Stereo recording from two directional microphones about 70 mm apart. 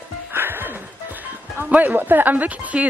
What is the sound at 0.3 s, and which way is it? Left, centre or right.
Music, right.